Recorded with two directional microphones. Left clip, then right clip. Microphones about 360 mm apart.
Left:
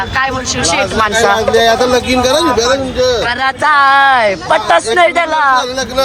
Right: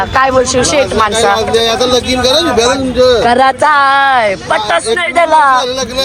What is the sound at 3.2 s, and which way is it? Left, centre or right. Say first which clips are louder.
Speech: right 4 dB; centre.